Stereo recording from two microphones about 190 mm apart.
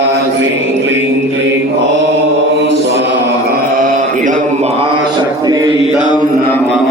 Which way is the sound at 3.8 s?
45° right (ahead or behind).